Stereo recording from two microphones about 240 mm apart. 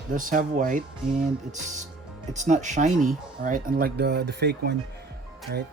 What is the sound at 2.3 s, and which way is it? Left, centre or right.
Speech, right.